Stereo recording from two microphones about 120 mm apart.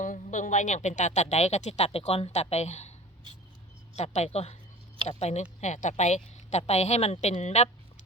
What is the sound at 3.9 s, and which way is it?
A woman's voice, 65° left (ahead or behind).